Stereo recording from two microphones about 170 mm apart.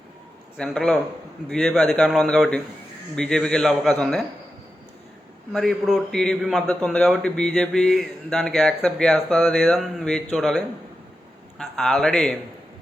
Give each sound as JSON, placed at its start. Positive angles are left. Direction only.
{"t": 0.5, "sound": "speech", "side_deg": 5}
{"t": 5.5, "sound": "a man's voice", "side_deg": 0}